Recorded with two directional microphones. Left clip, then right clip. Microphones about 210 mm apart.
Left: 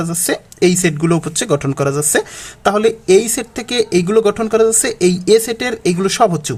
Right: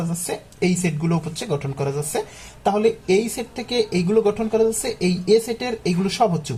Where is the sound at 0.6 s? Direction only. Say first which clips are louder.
Left 9 dB; 35° left (ahead or behind).